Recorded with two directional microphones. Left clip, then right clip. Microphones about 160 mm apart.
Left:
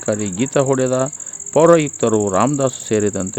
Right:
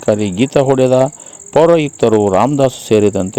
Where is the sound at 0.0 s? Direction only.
30° right (ahead or behind).